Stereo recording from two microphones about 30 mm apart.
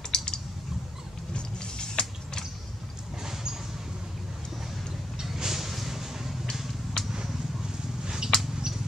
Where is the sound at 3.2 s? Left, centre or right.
Centre.